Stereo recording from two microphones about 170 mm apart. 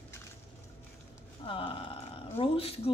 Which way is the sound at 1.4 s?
30° left (ahead or behind).